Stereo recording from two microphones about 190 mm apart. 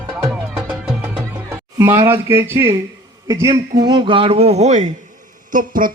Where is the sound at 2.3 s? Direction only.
15° right (ahead or behind); by 5.9 s 45° right (ahead or behind).